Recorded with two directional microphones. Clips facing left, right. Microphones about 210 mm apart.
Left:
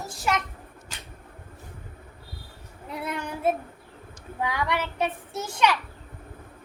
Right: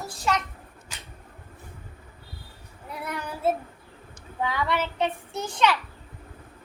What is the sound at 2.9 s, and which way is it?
A child's voice, 20° left (ahead or behind).